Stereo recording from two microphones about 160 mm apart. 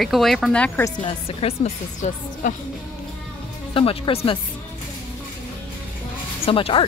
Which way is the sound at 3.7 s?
35° left (ahead or behind).